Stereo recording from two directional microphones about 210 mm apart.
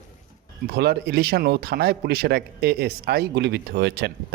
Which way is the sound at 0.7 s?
50° right (ahead or behind).